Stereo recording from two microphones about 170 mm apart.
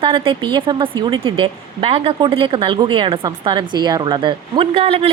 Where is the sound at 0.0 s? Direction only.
30° right (ahead or behind).